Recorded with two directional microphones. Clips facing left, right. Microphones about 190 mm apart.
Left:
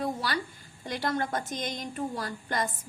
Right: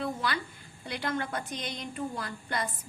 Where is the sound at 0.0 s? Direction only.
40° left (ahead or behind).